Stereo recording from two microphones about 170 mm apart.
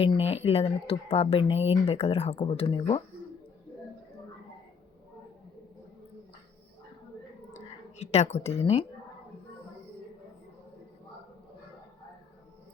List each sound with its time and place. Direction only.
0.0 s speech: 35° left (ahead or behind)
7.9 s speech: 40° left (ahead or behind)